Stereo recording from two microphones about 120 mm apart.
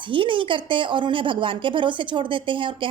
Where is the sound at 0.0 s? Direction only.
45° right (ahead or behind).